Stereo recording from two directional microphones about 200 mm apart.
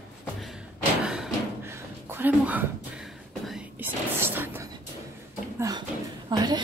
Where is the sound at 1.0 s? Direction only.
Centre (ahead or behind).